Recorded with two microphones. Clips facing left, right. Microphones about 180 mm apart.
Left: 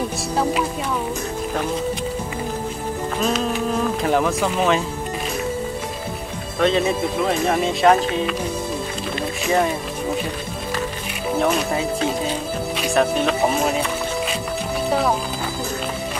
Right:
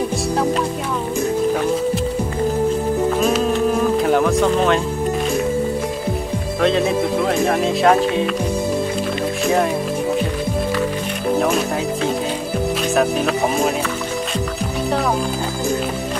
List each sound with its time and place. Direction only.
3.2 s music: 10° right (ahead or behind)
6.6 s speech: centre (ahead or behind)
11.3 s speech: centre (ahead or behind)
12.9 s speech: 5° right (ahead or behind)